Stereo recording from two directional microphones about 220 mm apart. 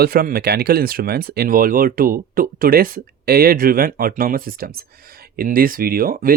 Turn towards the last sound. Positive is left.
turn(degrees=-40)  # may be behind; listen again after turning